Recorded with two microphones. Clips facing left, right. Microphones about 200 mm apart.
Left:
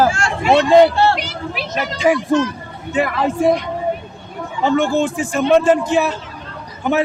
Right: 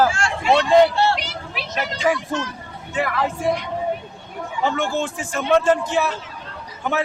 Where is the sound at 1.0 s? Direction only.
50° left (ahead or behind).